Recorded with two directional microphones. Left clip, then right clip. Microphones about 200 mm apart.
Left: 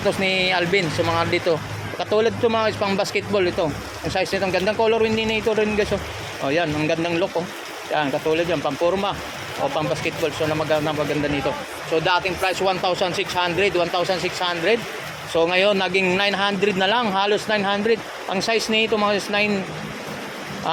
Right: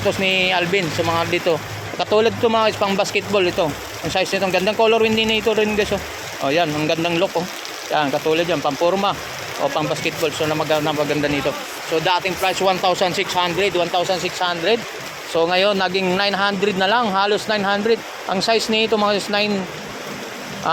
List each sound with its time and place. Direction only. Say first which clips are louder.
0.0 s speech: right 2 dB; 5° right (ahead or behind)
13.6 s speech: right 1 dB; centre (ahead or behind)